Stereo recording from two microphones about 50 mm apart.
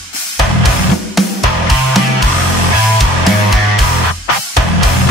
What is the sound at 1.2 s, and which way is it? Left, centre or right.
Music, centre.